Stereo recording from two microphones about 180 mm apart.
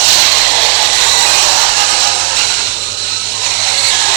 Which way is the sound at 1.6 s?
65° right (ahead or behind).